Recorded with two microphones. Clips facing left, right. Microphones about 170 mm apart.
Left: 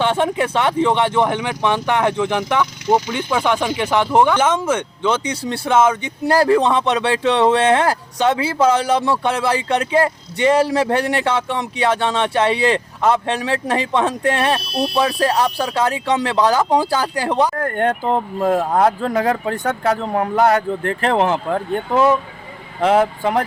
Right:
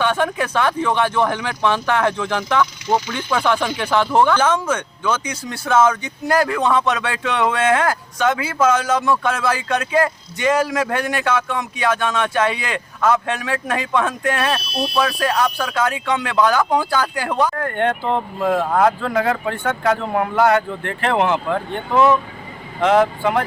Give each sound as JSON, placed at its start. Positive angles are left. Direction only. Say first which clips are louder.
{"t": 0.0, "sound": "speech", "louder": "left 2 dB", "side_deg": 25}
{"t": 17.6, "sound": "speech", "louder": "left 1 dB", "side_deg": 40}